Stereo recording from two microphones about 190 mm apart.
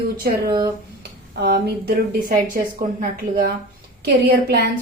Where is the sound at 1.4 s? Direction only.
55° right (ahead or behind).